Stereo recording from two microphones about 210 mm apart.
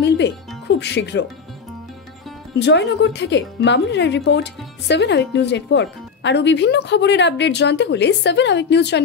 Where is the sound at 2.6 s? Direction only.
55° left (ahead or behind).